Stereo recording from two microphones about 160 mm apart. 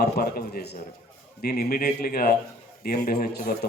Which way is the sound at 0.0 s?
70° left (ahead or behind).